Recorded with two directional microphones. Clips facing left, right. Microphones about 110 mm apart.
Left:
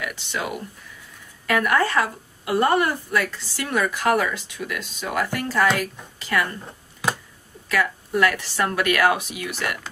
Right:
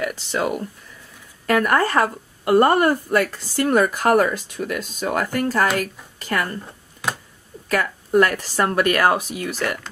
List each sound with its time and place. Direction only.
0.0 s a woman's voice: 40° right (ahead or behind)
6.6 s a sound: centre (ahead or behind)
7.6 s a woman's voice: 45° right (ahead or behind)